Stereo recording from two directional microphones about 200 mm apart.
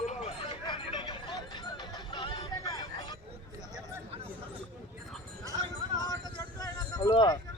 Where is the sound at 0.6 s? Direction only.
25° left (ahead or behind).